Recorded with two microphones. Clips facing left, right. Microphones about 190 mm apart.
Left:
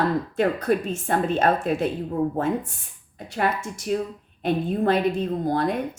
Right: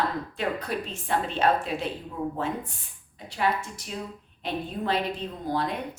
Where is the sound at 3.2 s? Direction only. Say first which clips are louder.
Left 2 dB; 50° left (ahead or behind).